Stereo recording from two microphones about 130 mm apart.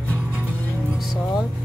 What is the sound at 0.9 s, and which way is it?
Vehicle, centre (ahead or behind).